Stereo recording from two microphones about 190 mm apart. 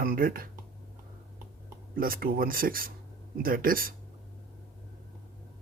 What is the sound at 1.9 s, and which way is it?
Speech, 50° right (ahead or behind).